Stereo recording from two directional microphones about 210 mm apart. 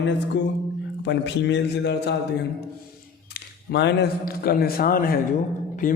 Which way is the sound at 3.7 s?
55° left (ahead or behind).